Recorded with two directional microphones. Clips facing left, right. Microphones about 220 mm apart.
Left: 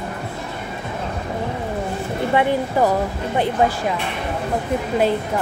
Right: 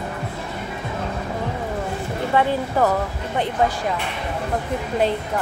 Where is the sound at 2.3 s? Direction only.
15° left (ahead or behind).